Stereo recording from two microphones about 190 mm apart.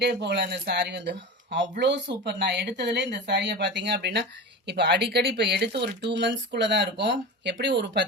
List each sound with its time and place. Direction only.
0.0 s speech: 60° right (ahead or behind)